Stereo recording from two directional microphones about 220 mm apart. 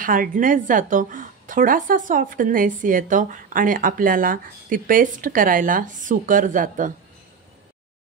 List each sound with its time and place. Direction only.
0.0 s a woman's voice: 40° right (ahead or behind)